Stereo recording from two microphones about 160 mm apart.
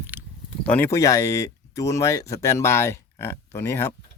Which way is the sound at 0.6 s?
10° left (ahead or behind).